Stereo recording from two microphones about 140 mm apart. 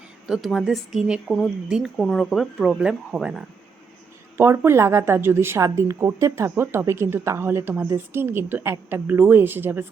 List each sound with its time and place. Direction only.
0.3 s speech: centre (ahead or behind)
4.4 s speech: 20° right (ahead or behind)